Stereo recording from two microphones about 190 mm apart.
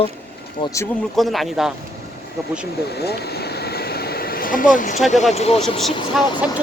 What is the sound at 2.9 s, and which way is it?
Vehicle, 60° left (ahead or behind).